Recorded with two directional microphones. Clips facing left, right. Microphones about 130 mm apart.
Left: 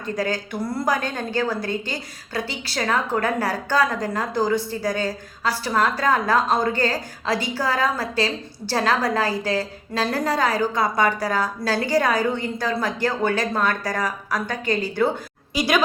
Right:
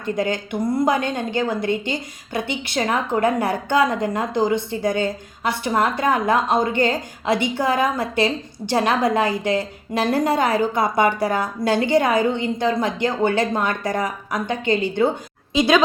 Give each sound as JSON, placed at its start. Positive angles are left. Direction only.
{"t": 0.2, "sound": "a woman's voice", "side_deg": -20}